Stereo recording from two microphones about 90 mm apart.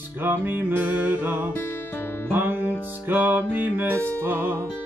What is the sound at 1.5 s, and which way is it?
Music, 20° left (ahead or behind).